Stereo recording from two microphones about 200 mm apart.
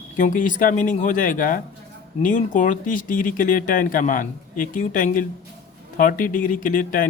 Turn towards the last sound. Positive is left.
turn(degrees=45)  # may be behind; listen again after turning